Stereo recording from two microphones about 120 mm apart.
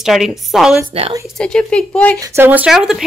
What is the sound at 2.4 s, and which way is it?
Speech, 15° right (ahead or behind).